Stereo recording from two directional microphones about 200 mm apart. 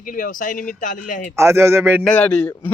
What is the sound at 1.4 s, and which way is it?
Speech, 15° right (ahead or behind).